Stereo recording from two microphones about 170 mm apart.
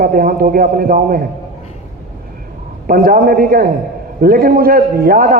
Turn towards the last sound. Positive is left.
turn(degrees=-60)  # may be behind; listen again after turning